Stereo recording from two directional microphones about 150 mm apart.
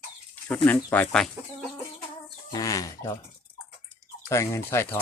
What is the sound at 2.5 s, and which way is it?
Bird, 25° left (ahead or behind).